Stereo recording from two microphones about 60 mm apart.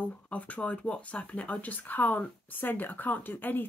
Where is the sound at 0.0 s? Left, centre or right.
Left.